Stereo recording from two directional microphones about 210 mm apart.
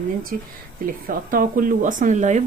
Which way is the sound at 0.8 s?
40° right (ahead or behind).